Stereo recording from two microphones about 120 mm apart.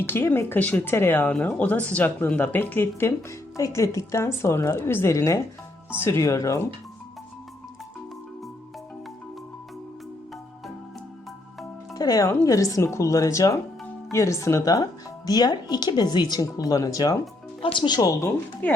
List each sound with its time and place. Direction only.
0.0 s a woman's voice: 20° left (ahead or behind)
11.9 s a woman's voice: 30° left (ahead or behind)
17.6 s speech: 45° left (ahead or behind)
18.6 s speech: 15° left (ahead or behind)